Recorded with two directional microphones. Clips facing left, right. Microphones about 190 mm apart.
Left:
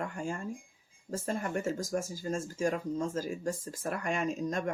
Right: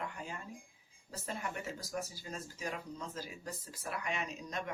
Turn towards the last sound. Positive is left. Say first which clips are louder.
# left 9 dB
turn(degrees=45)  # may be behind; listen again after turning